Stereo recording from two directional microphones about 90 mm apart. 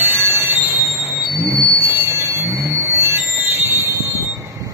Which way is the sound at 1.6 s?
30° right (ahead or behind).